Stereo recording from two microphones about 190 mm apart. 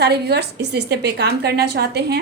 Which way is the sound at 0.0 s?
60° right (ahead or behind).